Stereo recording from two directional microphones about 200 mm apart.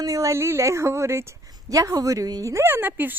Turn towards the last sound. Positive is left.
turn(degrees=-10)  # may be behind; listen again after turning